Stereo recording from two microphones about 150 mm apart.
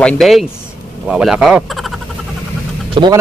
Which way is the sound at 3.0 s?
35° right (ahead or behind).